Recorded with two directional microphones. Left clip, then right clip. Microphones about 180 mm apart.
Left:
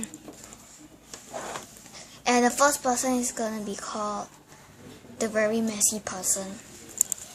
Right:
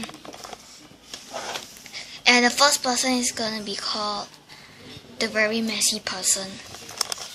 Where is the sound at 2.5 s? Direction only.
15° left (ahead or behind).